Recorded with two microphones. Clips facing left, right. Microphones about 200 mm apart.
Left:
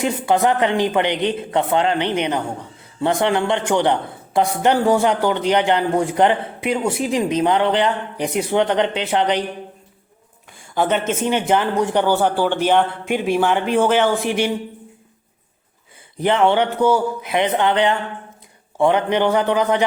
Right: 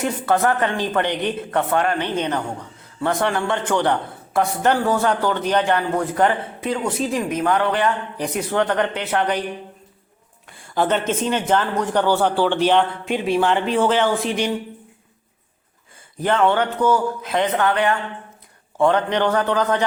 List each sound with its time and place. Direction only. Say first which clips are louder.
0.0 s a man's voice: left 2 dB; 15° left (ahead or behind)
10.5 s a man's voice: left 1 dB; 5° left (ahead or behind)
14.2 s a man's voice: left 2 dB; 65° left (ahead or behind)
16.1 s a man's voice: left 2 dB; 15° left (ahead or behind)